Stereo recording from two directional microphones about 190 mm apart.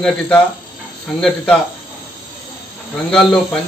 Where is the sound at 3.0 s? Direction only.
5° left (ahead or behind).